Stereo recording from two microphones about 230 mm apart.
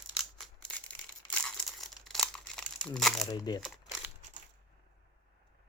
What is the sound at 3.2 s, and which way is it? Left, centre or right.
Speech, centre.